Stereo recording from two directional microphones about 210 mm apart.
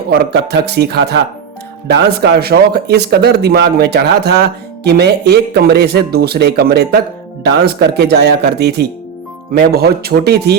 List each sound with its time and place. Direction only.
0.1 s speech: 55° right (ahead or behind)